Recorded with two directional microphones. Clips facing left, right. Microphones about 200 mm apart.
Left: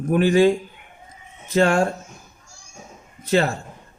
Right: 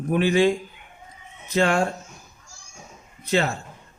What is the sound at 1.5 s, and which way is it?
Speech, 45° left (ahead or behind).